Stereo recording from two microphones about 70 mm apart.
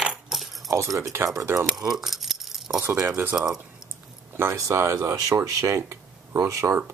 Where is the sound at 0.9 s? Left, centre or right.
Right.